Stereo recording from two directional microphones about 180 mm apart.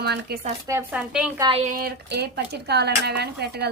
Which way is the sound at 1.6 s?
55° right (ahead or behind).